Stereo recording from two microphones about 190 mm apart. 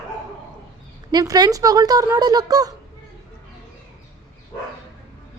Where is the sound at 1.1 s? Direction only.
20° right (ahead or behind).